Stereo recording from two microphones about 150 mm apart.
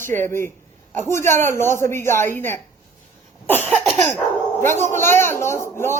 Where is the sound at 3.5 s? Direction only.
10° left (ahead or behind).